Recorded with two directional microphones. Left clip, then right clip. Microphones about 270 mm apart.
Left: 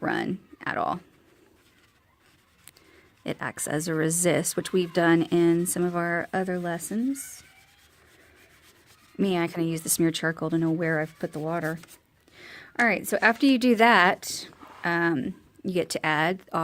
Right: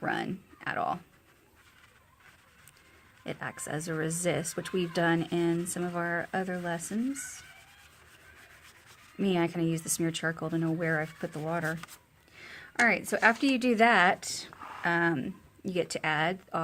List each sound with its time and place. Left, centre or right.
0.0 s speech: left
3.2 s speech: left
9.1 s speech: left
14.5 s a sound: centre
14.8 s speech: left